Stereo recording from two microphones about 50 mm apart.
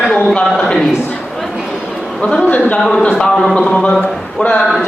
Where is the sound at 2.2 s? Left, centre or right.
Left.